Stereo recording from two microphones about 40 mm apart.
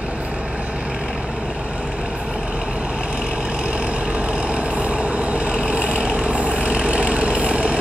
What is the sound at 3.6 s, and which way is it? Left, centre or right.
Vehicle, right.